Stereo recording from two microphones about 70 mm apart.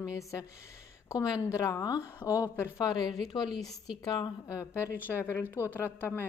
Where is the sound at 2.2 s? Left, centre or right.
Left.